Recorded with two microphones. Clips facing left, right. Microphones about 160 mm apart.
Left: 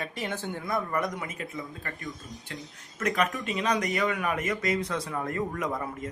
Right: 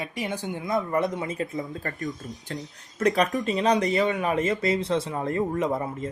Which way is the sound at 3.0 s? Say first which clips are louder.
Right 5 dB; 35° right (ahead or behind).